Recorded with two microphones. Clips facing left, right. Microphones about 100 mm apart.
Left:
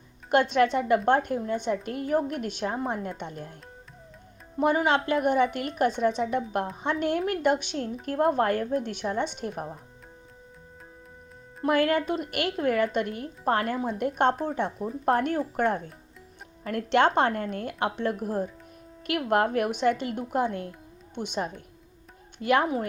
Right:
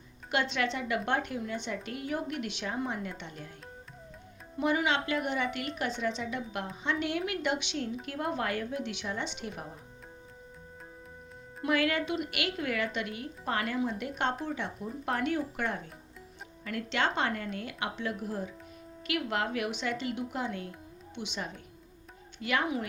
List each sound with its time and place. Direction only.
0.3 s a woman's voice: 50° left (ahead or behind)
4.5 s a woman's voice: 45° left (ahead or behind)
11.6 s a woman's voice: 45° left (ahead or behind)